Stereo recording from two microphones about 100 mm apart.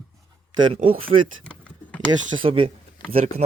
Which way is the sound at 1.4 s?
10° left (ahead or behind).